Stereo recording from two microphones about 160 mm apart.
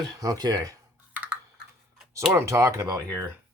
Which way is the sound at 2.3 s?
15° right (ahead or behind).